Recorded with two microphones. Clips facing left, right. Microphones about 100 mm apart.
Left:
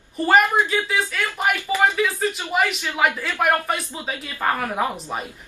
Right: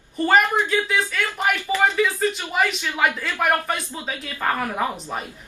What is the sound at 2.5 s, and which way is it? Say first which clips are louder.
Speech: left 1 dB; 5° left (ahead or behind).